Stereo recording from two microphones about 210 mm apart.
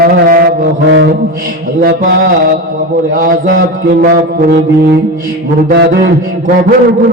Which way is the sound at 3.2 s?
40° right (ahead or behind).